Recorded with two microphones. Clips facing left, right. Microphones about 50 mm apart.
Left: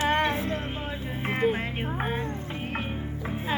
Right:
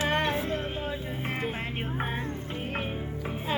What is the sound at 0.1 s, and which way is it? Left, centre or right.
Music, centre.